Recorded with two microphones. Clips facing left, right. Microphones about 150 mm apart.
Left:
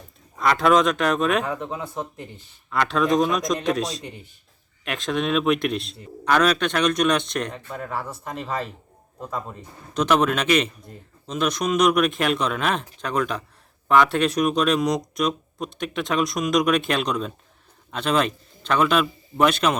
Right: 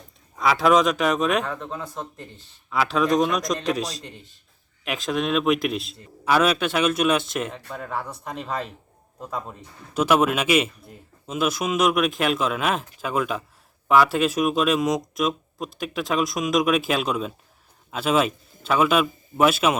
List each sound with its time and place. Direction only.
0.3 s a man's voice: centre (ahead or behind)
1.5 s a man's voice: 15° left (ahead or behind)
2.6 s a man's voice: 5° right (ahead or behind)